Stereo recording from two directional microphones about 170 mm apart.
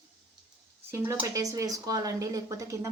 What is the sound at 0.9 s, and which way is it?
Speech, 15° right (ahead or behind).